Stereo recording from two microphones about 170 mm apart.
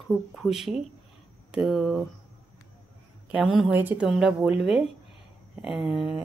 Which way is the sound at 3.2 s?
5° right (ahead or behind).